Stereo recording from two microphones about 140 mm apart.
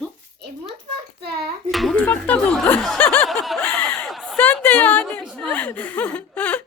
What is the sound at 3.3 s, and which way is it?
Snicker, centre (ahead or behind).